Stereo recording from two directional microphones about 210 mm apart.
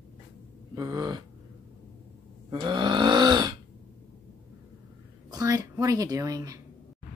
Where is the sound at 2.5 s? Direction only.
20° right (ahead or behind).